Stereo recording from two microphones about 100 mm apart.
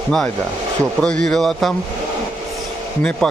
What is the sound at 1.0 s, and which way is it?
Speech, 10° left (ahead or behind).